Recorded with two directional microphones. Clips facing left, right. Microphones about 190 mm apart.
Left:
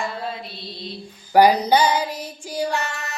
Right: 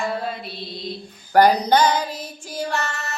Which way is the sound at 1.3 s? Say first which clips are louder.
Even; 10° left (ahead or behind).